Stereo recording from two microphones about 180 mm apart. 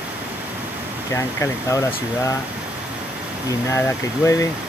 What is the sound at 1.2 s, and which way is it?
Speech, 15° left (ahead or behind).